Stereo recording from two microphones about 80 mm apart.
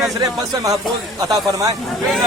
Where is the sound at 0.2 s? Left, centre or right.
Right.